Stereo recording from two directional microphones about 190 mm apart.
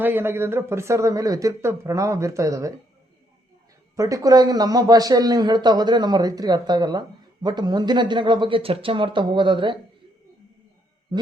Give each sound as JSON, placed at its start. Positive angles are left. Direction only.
{"t": 0.0, "sound": "speech", "side_deg": -10}
{"t": 3.9, "sound": "speech", "side_deg": -15}